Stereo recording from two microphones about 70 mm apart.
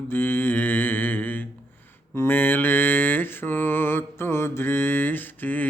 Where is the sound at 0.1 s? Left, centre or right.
Left.